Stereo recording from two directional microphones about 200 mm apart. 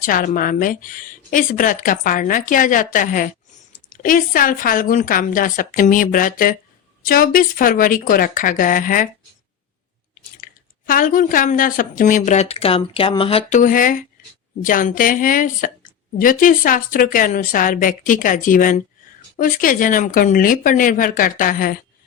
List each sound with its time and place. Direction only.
0.0 s speech: 40° left (ahead or behind)
10.8 s a woman's voice: 45° left (ahead or behind)